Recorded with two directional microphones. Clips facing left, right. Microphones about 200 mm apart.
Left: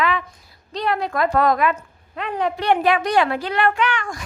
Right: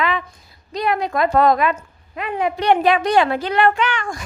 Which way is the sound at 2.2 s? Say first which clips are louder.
Right 2 dB; 10° right (ahead or behind).